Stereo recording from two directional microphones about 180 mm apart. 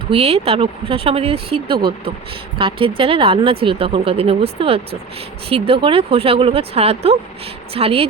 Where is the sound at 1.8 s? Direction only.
60° right (ahead or behind).